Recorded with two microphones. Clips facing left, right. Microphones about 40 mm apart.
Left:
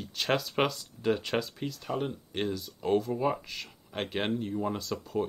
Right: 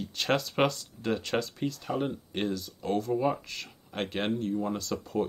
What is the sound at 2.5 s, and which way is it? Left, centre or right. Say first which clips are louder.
Speech: left 2 dB; centre.